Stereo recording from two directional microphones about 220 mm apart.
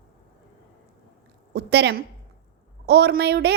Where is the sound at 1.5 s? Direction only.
50° right (ahead or behind).